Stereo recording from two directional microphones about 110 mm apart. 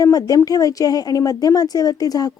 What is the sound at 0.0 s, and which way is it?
Speech, 30° left (ahead or behind).